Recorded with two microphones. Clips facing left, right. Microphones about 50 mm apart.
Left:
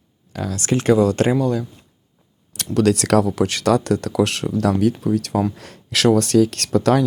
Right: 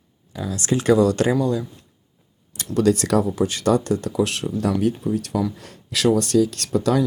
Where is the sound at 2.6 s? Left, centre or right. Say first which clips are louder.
Left 1 dB; left.